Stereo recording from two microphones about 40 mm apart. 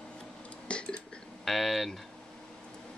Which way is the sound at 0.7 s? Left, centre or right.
Left.